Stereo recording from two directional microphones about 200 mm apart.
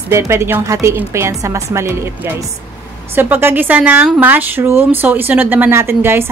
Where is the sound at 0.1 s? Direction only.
15° right (ahead or behind).